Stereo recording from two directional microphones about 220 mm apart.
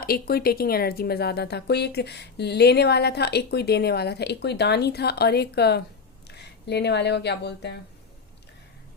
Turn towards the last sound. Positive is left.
turn(degrees=50)  # may be behind; listen again after turning